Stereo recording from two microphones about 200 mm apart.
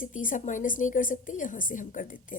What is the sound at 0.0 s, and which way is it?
A woman's voice, 40° left (ahead or behind).